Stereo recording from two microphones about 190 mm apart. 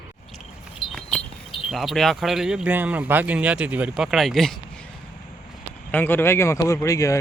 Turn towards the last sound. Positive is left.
turn(degrees=15)  # may be behind; listen again after turning